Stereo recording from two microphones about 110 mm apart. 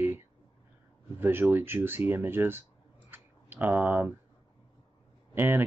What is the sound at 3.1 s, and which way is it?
Clicking, 20° right (ahead or behind).